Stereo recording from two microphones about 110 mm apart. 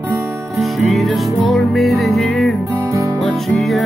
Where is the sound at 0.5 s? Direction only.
Centre (ahead or behind).